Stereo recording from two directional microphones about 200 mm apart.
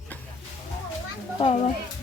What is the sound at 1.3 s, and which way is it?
Speech, 25° left (ahead or behind).